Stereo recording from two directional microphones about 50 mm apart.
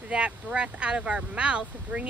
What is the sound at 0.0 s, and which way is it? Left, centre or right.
Speech, right.